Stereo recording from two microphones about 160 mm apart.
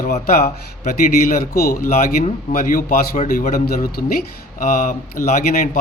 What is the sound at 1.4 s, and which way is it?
Speech, 70° left (ahead or behind).